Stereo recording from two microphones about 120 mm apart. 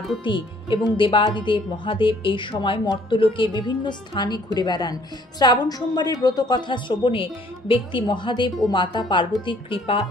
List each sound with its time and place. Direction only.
0.2 s a woman's voice: 45° left (ahead or behind)